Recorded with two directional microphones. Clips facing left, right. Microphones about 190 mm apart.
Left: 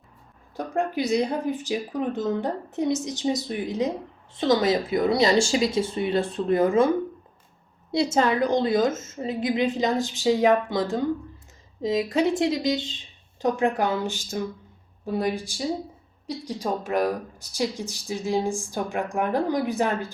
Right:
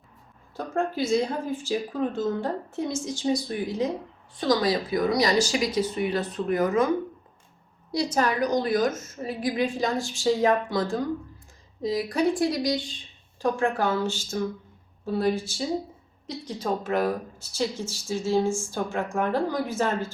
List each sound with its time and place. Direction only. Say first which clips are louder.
0.5 s speech: left 1 dB; 15° left (ahead or behind)
7.9 s speech: left 3 dB; 25° left (ahead or behind)